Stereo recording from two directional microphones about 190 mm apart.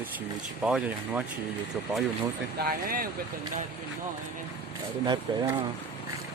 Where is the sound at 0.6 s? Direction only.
5° right (ahead or behind).